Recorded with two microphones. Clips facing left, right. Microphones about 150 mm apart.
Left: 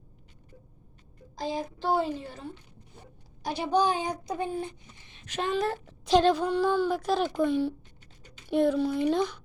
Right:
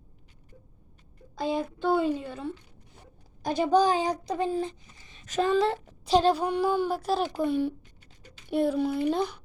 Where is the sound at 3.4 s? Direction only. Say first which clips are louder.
Right 5 dB; 45° right (ahead or behind).